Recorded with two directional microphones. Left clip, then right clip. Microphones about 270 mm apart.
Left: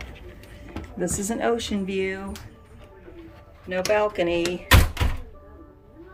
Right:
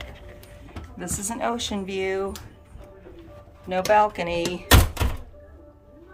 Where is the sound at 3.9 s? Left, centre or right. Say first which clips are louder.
Right 2 dB; centre.